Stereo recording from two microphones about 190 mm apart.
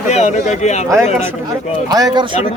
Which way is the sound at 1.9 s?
20° right (ahead or behind).